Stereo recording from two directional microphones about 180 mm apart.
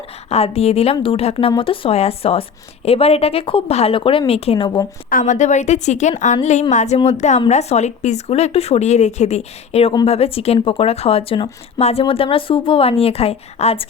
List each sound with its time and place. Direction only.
0.3 s a woman's voice: 35° left (ahead or behind)
5.0 s a woman's voice: 45° left (ahead or behind)